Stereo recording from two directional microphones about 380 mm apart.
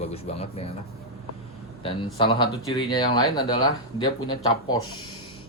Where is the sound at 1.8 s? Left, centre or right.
Centre.